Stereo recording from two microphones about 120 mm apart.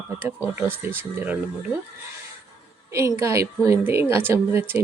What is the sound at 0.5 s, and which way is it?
Speech, 20° right (ahead or behind).